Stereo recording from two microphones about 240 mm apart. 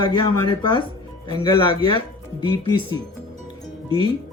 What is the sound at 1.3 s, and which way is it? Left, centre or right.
Speech, centre.